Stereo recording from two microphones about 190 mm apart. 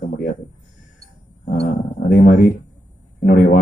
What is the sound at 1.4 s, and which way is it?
Speech, 50° left (ahead or behind).